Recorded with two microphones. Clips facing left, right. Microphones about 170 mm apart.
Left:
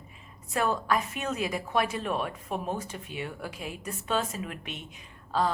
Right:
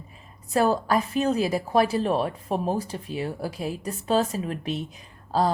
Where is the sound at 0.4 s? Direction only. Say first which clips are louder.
Right 6 dB; 35° right (ahead or behind).